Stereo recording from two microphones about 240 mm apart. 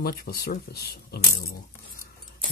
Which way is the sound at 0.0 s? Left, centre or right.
Left.